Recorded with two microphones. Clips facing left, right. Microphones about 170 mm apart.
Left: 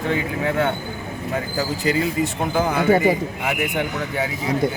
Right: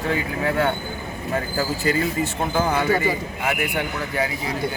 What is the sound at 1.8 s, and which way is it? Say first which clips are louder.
Speech: left 3 dB; 15° left (ahead or behind).